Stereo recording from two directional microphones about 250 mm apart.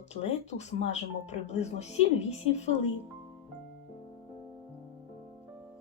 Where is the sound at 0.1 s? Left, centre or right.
Left.